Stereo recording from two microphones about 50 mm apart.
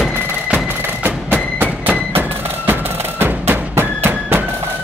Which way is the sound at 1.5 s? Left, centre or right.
Right.